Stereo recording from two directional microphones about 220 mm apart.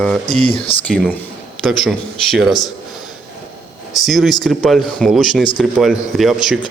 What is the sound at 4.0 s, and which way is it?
A man's voice, centre (ahead or behind).